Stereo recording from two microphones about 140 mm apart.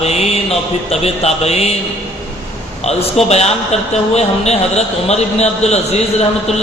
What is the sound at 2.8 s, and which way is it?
A man's voice, 50° left (ahead or behind).